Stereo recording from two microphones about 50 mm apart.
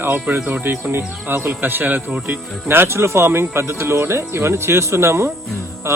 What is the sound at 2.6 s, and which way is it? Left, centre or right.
Speech, right.